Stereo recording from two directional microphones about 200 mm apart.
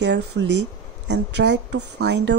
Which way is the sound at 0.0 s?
60° right (ahead or behind).